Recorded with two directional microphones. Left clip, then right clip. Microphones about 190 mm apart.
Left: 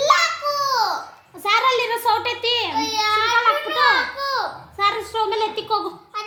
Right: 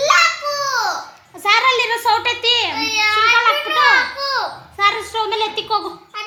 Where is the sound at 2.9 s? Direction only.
20° left (ahead or behind).